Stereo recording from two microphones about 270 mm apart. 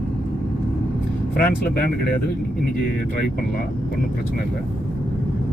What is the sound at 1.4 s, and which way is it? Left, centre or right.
Speech, left.